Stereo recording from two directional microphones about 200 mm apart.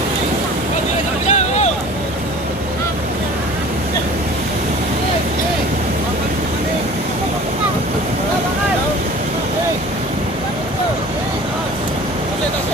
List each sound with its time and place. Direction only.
1.3 s boat: 35° left (ahead or behind)